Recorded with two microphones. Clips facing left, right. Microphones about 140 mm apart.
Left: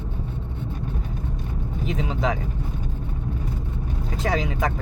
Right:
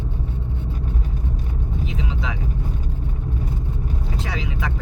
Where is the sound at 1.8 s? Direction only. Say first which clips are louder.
Left 8 dB; 45° left (ahead or behind).